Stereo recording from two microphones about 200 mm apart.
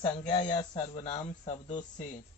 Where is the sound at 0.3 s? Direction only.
30° left (ahead or behind).